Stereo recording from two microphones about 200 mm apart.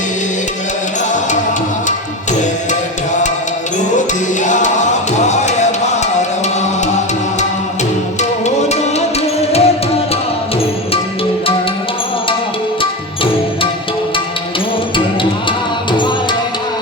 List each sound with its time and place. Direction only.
4.4 s music: 40° left (ahead or behind)
8.2 s music: 35° left (ahead or behind)
14.9 s music: 25° left (ahead or behind)